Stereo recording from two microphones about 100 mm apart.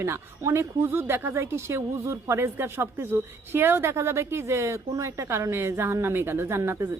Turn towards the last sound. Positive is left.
turn(degrees=-25)  # may be behind; listen again after turning